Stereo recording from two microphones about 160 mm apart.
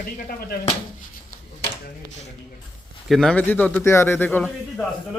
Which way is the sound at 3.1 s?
5° left (ahead or behind).